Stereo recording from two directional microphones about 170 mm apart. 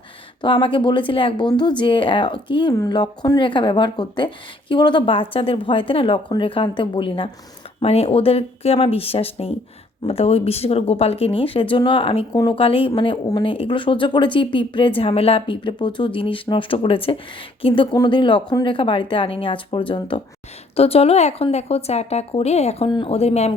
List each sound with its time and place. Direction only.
0.4 s a woman's voice: 30° left (ahead or behind)